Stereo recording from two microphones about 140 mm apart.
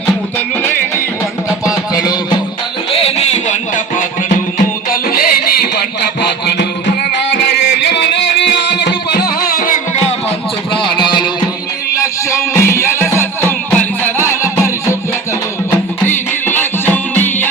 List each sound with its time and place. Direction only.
0.3 s music: 15° left (ahead or behind)
1.6 s music: 25° left (ahead or behind)
2.9 s a sound: 50° left (ahead or behind)
4.5 s music: 90° left
9.5 s music: 80° left; by 10.2 s 65° left (ahead or behind)
10.9 s music: 35° left (ahead or behind)
12.3 s music: 20° left (ahead or behind)
16.0 s music: 15° left (ahead or behind)